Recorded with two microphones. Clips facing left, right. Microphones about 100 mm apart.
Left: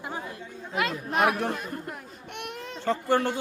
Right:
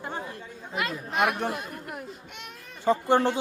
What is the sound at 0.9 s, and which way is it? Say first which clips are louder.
Speech: left 1 dB; centre (ahead or behind).